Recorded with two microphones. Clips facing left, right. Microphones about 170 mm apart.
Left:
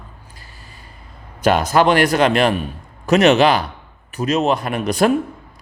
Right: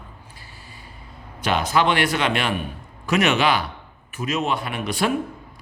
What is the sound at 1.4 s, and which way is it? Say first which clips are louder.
A man's voice: left 6 dB; 45° left (ahead or behind).